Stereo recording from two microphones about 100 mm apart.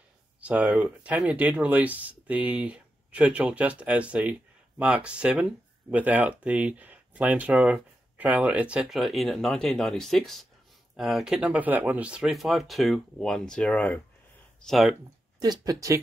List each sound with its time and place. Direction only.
0.4 s speech: 15° right (ahead or behind); by 14.0 s 15° left (ahead or behind)
14.6 s speech: centre (ahead or behind)
15.3 s speech: 40° right (ahead or behind)